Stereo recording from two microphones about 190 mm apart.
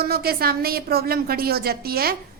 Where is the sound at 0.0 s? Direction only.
55° right (ahead or behind).